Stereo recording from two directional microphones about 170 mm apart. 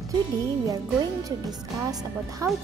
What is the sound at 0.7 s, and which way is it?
A woman's voice, 20° right (ahead or behind).